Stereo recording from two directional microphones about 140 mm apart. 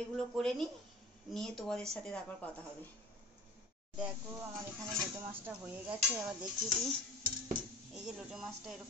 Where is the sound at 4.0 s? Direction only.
10° right (ahead or behind).